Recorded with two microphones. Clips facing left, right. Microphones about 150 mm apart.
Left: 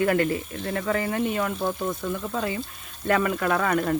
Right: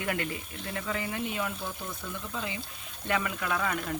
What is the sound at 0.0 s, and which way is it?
Speech, 50° left (ahead or behind).